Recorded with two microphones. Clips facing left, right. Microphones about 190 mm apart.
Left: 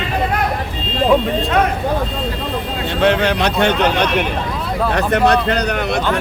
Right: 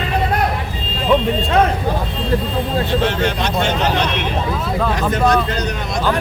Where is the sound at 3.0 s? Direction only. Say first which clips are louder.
Left 4 dB; 65° left (ahead or behind).